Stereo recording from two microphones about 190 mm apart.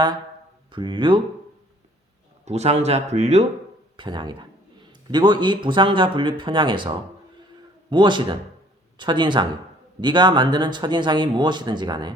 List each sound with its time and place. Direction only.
0.7 s speech: 25° right (ahead or behind)
2.4 s speech: 35° right (ahead or behind)
3.9 s speech: 25° right (ahead or behind)